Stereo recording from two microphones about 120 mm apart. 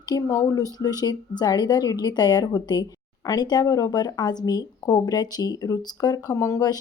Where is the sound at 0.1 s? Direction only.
30° left (ahead or behind).